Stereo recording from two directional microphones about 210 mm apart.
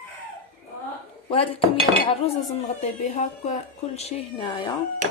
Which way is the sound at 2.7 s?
35° left (ahead or behind).